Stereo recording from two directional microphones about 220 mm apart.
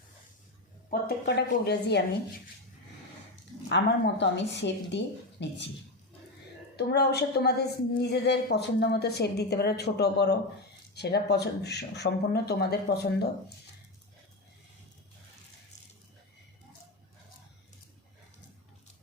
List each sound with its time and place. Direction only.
0.9 s a woman's voice: 45° left (ahead or behind)
3.7 s a woman's voice: 55° left (ahead or behind)
6.7 s a woman's voice: 45° left (ahead or behind)